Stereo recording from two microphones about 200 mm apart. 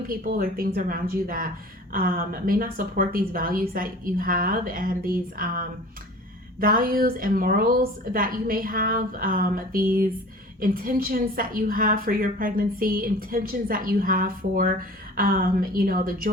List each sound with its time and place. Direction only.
0.1 s a woman's voice: 45° right (ahead or behind)